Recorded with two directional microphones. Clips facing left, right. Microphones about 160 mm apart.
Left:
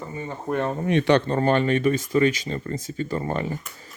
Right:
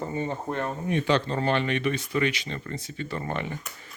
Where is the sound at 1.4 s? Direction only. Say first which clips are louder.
Left 5 dB; 45° left (ahead or behind).